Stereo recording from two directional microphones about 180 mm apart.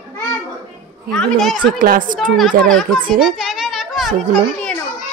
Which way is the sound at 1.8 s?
50° right (ahead or behind).